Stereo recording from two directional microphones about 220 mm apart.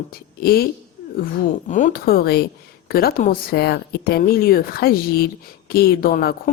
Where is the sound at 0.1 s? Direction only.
45° left (ahead or behind).